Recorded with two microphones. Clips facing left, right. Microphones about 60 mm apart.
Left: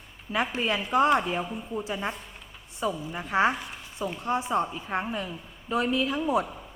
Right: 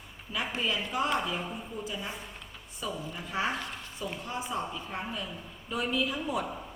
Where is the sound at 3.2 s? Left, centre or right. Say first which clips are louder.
Left 9 dB; left.